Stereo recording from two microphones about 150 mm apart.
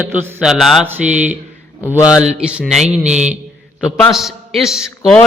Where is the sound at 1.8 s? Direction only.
25° left (ahead or behind).